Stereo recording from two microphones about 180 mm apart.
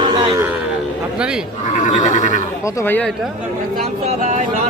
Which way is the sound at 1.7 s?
45° left (ahead or behind).